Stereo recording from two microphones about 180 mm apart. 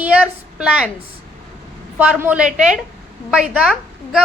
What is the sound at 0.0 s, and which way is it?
Speech, 5° right (ahead or behind).